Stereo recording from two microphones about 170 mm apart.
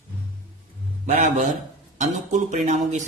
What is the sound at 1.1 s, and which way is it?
Speech, 45° right (ahead or behind).